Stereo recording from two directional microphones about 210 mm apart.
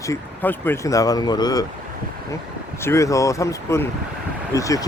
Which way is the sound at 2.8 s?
15° left (ahead or behind).